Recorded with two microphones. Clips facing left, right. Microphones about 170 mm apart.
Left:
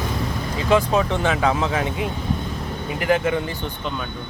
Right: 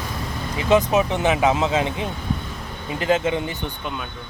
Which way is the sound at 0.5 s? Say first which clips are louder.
Right 1 dB; 20° right (ahead or behind).